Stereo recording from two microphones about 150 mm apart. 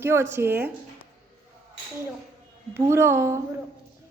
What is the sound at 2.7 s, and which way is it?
Speech, 15° right (ahead or behind).